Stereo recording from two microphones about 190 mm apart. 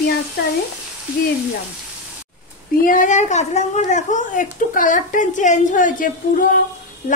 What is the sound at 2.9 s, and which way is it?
A woman's voice, 40° left (ahead or behind).